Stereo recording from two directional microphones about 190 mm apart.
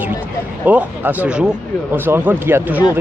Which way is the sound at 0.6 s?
10° right (ahead or behind).